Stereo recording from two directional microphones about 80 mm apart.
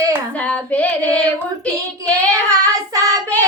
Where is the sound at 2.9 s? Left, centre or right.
Right.